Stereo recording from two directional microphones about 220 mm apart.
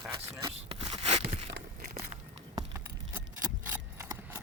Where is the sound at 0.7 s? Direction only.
25° right (ahead or behind).